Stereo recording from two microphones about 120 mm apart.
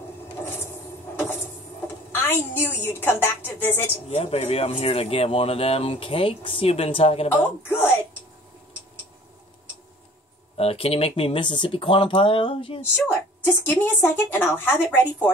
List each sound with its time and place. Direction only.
1.1 s vehicle: 20° left (ahead or behind)
2.1 s a woman's voice: 15° left (ahead or behind)
4.1 s speech: 60° left (ahead or behind)
7.2 s a woman's voice: 15° left (ahead or behind)
10.6 s speech: 55° left (ahead or behind)
13.0 s a woman's voice: 20° left (ahead or behind)